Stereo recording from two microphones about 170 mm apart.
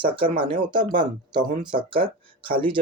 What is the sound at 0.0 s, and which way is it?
Speech, 30° right (ahead or behind).